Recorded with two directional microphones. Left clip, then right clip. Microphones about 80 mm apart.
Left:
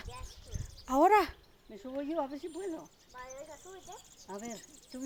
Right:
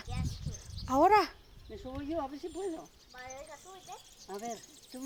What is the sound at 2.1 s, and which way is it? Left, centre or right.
Speech, left.